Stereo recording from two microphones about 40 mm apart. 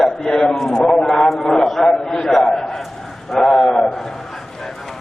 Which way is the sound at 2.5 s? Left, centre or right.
Centre.